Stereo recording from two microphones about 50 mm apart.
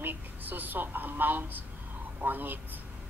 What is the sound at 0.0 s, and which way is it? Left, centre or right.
A woman's voice, right.